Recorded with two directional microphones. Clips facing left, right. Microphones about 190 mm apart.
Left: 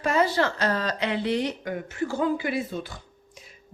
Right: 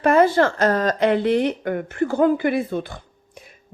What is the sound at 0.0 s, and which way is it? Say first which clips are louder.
A woman's voice: right 7 dB; 55° right (ahead or behind).